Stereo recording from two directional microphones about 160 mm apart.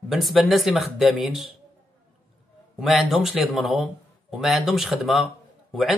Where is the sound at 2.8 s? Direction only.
Centre (ahead or behind).